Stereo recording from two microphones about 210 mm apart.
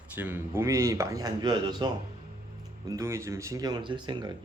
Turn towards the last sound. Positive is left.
turn(degrees=-20)  # may be behind; listen again after turning